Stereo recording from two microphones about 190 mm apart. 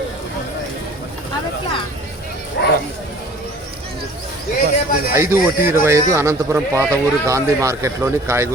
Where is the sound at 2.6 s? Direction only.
60° left (ahead or behind).